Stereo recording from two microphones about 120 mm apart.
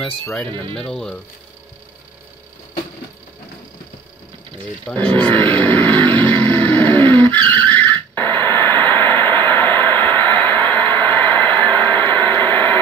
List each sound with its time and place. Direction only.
0.0 s speech: 5° left (ahead or behind)
0.5 s speech: 45° right (ahead or behind)
0.8 s speech: 5° left (ahead or behind)
4.8 s vehicle: 15° left (ahead or behind)
9.5 s a sound: 15° left (ahead or behind)